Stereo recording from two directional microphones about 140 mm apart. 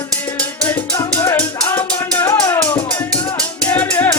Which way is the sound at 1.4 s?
15° left (ahead or behind).